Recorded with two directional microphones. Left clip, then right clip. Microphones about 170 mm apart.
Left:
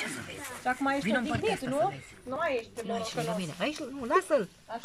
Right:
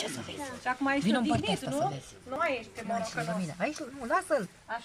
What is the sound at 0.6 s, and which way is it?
Speech, 20° left (ahead or behind).